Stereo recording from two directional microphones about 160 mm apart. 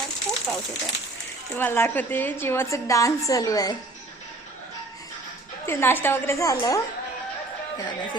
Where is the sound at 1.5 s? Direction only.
15° left (ahead or behind).